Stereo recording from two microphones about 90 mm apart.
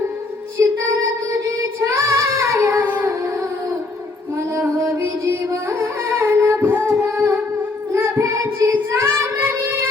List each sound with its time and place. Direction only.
0.6 s music: 35° right (ahead or behind)
1.8 s child singing: 35° right (ahead or behind)
2.8 s music: 20° right (ahead or behind)
4.5 s music: 30° right (ahead or behind)
6.8 s singing: 35° right (ahead or behind)
7.9 s music: 25° right (ahead or behind)
8.9 s child singing: 25° right (ahead or behind)